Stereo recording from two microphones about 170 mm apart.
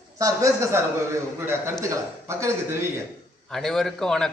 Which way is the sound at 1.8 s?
15° right (ahead or behind).